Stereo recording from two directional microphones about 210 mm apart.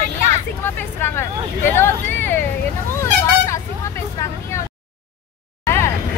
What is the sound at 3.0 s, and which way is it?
Vehicle, 15° left (ahead or behind).